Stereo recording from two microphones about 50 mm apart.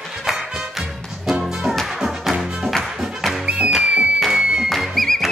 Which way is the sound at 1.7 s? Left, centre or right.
Centre.